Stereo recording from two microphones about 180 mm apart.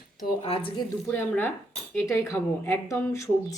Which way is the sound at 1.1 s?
10° left (ahead or behind).